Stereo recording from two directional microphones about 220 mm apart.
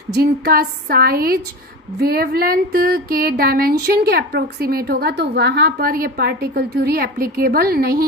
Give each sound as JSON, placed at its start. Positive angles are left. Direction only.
{"t": 0.1, "sound": "speech", "side_deg": -45}